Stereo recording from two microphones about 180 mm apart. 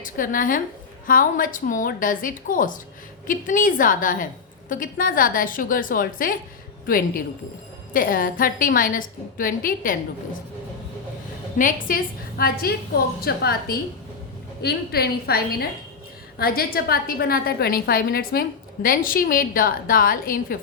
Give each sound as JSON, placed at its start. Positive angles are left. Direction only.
{"t": 0.0, "sound": "a woman's voice", "side_deg": 50}
{"t": 11.5, "sound": "a woman's voice", "side_deg": 50}